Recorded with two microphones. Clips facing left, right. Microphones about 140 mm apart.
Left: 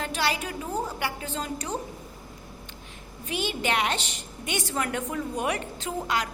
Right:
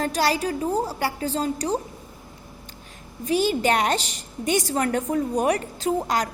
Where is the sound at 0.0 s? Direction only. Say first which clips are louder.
Right 6 dB; 40° right (ahead or behind).